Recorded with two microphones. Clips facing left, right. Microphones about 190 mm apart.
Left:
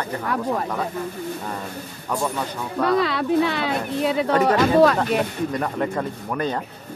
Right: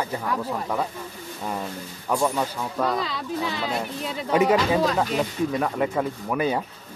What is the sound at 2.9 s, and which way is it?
Speech, 65° left (ahead or behind).